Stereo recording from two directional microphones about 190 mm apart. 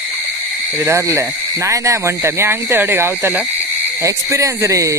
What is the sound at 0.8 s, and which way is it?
Speech, 15° right (ahead or behind).